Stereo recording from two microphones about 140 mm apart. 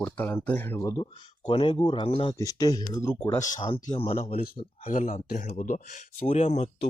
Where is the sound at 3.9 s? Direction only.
45° left (ahead or behind).